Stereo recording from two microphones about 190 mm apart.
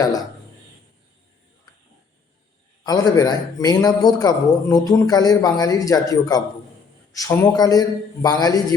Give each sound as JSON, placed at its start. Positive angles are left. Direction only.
{"t": 2.8, "sound": "a man's voice", "side_deg": 20}